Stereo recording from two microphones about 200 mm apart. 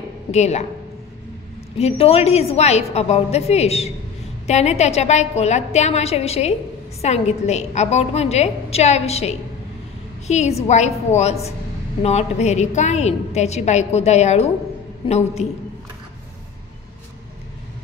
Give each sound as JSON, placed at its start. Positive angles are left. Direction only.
{"t": 0.3, "sound": "a woman's voice", "side_deg": 35}
{"t": 1.8, "sound": "a woman's voice", "side_deg": 30}